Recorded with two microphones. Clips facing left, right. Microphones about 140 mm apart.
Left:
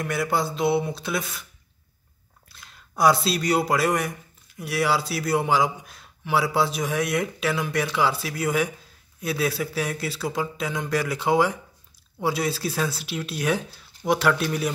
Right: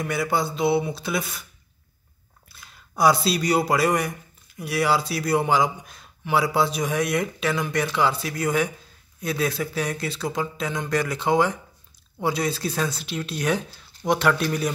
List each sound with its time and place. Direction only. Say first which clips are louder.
0.0 s a man's voice: even; centre (ahead or behind)
2.4 s a man's voice: even; 5° right (ahead or behind)